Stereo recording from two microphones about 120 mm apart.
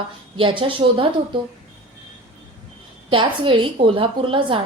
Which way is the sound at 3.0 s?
45° right (ahead or behind).